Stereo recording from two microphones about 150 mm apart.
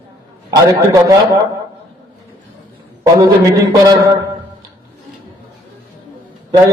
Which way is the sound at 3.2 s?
25° right (ahead or behind).